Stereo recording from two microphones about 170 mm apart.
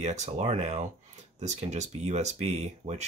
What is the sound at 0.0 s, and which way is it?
Speech, 40° right (ahead or behind).